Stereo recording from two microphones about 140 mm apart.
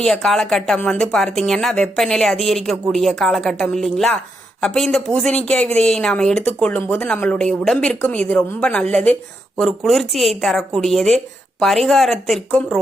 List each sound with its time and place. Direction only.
0.0 s a woman's voice: 5° left (ahead or behind)